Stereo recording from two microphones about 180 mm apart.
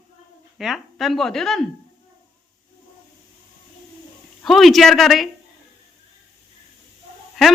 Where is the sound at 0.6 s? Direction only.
Centre (ahead or behind).